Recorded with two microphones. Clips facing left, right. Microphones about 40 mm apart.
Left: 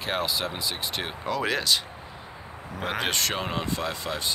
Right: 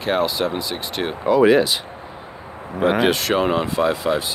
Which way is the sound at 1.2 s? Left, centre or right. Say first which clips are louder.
Right 13 dB; centre.